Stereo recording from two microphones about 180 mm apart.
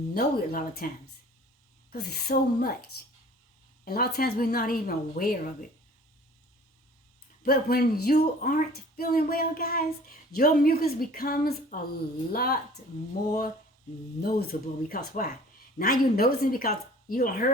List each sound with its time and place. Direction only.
0.1 s speech: 55° left (ahead or behind)
1.9 s speech: 65° left (ahead or behind)
3.8 s a woman's voice: 60° left (ahead or behind)
7.4 s speech: 55° left (ahead or behind)
14.2 s speech: 60° left (ahead or behind)